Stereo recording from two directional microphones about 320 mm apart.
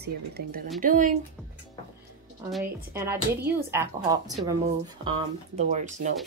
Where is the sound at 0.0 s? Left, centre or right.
Right.